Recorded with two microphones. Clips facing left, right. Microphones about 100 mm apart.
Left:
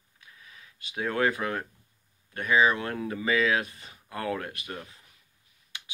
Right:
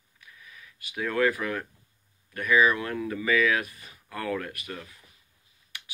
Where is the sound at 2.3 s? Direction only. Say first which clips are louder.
Right 1 dB; 25° left (ahead or behind).